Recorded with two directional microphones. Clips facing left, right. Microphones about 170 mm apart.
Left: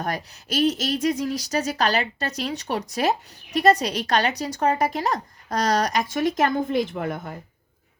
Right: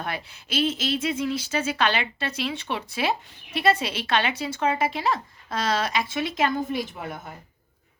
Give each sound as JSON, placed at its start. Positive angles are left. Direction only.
{"t": 0.0, "sound": "speech", "side_deg": 40}